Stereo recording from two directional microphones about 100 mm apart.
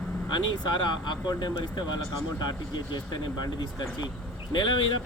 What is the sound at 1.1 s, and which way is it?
Speech, 45° left (ahead or behind).